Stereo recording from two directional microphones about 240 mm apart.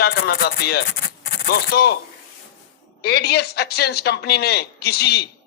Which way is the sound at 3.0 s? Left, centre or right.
Left.